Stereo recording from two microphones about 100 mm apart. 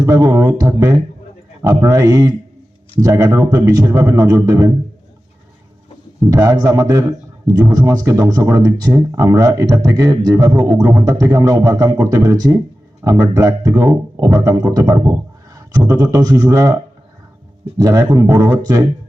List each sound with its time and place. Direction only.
0.0 s speech: 30° right (ahead or behind)
6.3 s speech: 35° right (ahead or behind)
15.5 s a sound: 35° right (ahead or behind)
16.1 s speech: 35° right (ahead or behind)
17.7 s speech: 35° right (ahead or behind)